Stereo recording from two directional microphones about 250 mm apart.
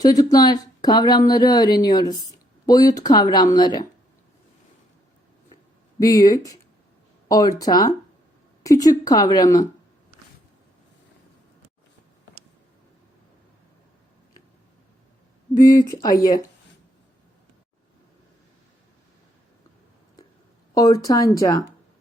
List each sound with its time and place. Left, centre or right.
0.0 s speech: centre
6.0 s speech: centre
15.9 s speech: centre
20.7 s speech: centre